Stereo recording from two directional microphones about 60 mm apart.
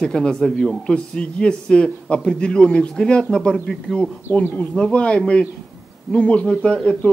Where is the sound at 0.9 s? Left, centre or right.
Centre.